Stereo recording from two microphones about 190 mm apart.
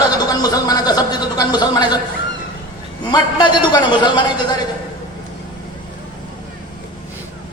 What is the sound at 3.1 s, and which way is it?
A man's voice, 25° left (ahead or behind).